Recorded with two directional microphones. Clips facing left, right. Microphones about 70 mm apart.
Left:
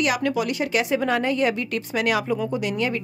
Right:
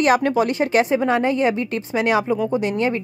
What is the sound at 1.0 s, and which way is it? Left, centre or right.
Speech, right.